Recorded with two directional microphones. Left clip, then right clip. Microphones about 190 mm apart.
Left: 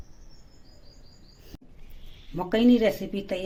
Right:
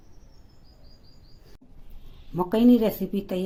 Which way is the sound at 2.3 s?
55° right (ahead or behind).